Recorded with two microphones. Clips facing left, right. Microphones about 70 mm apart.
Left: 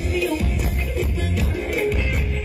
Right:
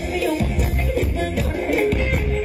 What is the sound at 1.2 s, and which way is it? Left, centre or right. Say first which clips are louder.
Music: right 3 dB; right.